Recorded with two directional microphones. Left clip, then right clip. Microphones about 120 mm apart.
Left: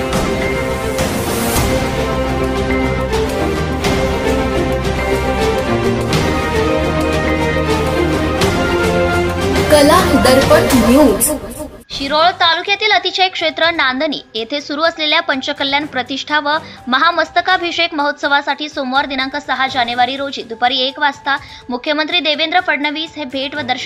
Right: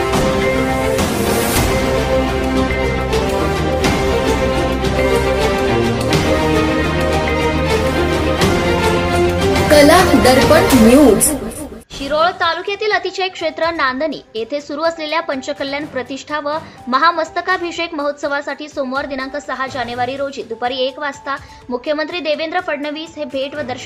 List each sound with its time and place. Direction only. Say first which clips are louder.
0.9 s music: right 1 dB; centre (ahead or behind)
4.6 s music: right 1 dB; centre (ahead or behind)
12.1 s a woman's voice: left 3 dB; 30° left (ahead or behind)